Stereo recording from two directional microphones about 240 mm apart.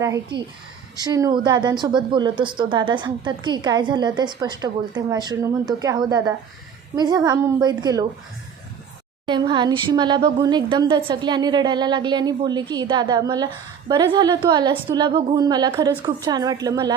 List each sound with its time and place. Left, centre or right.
0.0 s a woman's voice: centre
9.2 s a woman's voice: centre